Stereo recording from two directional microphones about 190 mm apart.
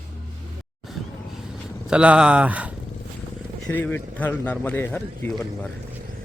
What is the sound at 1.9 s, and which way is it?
Speech, 5° right (ahead or behind).